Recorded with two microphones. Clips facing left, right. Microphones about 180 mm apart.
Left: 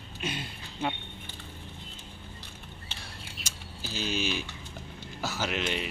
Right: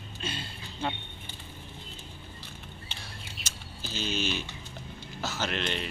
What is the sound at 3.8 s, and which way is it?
Speech, 10° left (ahead or behind).